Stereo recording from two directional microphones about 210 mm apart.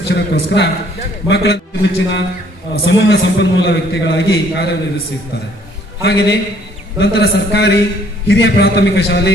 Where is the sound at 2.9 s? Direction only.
60° left (ahead or behind).